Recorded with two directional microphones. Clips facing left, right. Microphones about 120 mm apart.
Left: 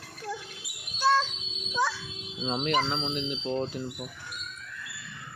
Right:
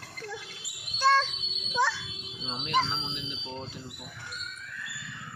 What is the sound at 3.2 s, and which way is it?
Speech, 55° left (ahead or behind).